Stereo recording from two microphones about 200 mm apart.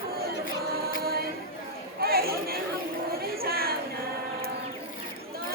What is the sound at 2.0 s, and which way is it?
Chatter, 50° right (ahead or behind).